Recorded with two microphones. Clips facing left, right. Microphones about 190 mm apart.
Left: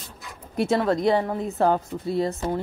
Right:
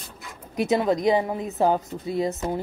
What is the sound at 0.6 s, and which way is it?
Speech, 20° right (ahead or behind).